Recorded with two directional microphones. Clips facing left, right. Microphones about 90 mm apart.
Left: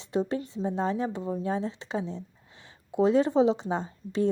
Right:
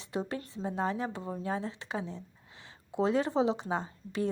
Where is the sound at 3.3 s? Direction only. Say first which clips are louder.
Left 6 dB; 20° right (ahead or behind).